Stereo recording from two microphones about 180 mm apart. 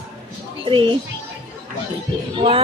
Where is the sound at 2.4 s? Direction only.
30° right (ahead or behind).